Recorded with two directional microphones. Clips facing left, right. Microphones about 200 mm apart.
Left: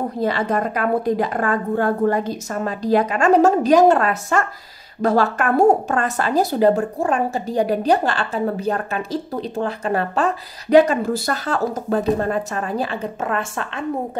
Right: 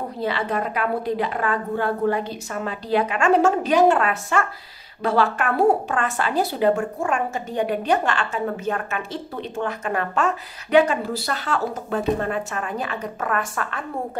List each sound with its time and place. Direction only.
0.2 s a woman's voice: 45° left (ahead or behind); by 13.8 s 25° left (ahead or behind)